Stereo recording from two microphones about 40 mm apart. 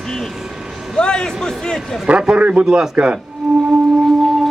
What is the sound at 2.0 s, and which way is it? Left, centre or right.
Speech, right.